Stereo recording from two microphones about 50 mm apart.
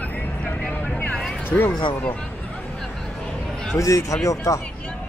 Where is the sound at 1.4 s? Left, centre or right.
Left.